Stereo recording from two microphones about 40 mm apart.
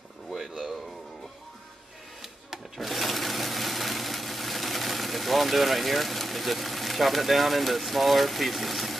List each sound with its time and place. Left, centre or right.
2.5 s sewing machine: centre